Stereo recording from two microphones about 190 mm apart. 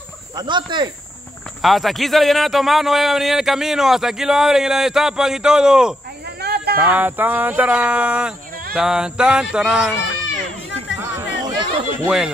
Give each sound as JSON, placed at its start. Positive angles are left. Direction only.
{"t": 0.4, "sound": "speech", "side_deg": -25}
{"t": 1.6, "sound": "a man's voice", "side_deg": 0}
{"t": 6.4, "sound": "a sound", "side_deg": -55}
{"t": 6.8, "sound": "a man's voice", "side_deg": -10}
{"t": 11.0, "sound": "chatter", "side_deg": -15}